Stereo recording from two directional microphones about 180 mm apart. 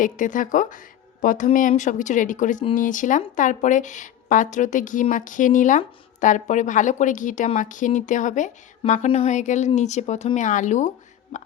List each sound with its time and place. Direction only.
0.0 s speech: 45° left (ahead or behind)